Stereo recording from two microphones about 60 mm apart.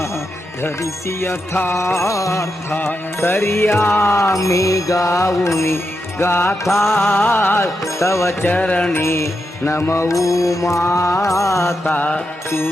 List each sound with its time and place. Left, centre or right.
0.8 s music: left
2.7 s music: left
4.1 s music: left
8.4 s music: left
8.9 s music: left
11.9 s music: left
12.5 s music: left